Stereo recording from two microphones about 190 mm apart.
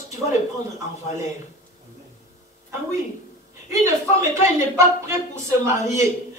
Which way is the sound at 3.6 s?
15° right (ahead or behind).